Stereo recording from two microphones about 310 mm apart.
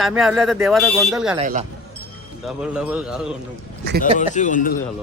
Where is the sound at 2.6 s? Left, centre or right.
Centre.